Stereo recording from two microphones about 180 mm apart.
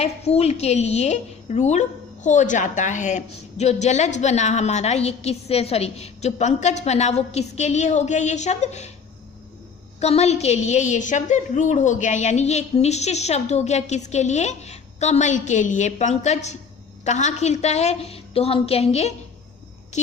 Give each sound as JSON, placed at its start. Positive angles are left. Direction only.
{"t": 0.0, "sound": "a woman's voice", "side_deg": 35}
{"t": 10.0, "sound": "a woman's voice", "side_deg": 35}